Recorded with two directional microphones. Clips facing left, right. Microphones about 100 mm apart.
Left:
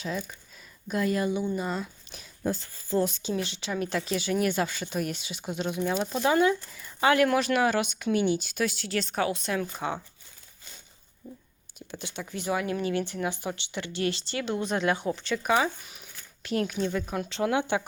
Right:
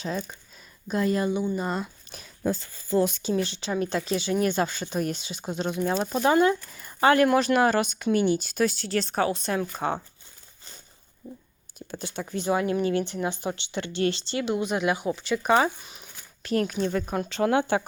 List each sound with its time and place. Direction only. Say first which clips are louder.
0.0 s speech: right 2 dB; 35° right (ahead or behind)
1.5 s speech: right 2 dB; 40° right (ahead or behind)
3.0 s speech: right 4 dB; 60° right (ahead or behind)
3.3 s a woman's voice: right 4 dB; 35° right (ahead or behind)
9.7 s speech: right 4 dB; 45° right (ahead or behind)
11.2 s speech: right 3 dB; 25° right (ahead or behind)
11.9 s speech: right 4 dB; 40° right (ahead or behind); by 15.4 s 15° right (ahead or behind)
15.4 s speech: right 3 dB; 40° right (ahead or behind)
15.8 s a sound: right 1 dB; 25° right (ahead or behind)
16.4 s speech: right 3 dB; 40° right (ahead or behind)